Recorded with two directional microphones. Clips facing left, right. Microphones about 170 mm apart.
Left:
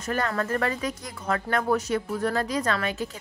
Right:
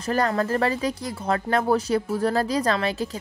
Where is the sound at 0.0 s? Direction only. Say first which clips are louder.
Right 4 dB; 35° right (ahead or behind).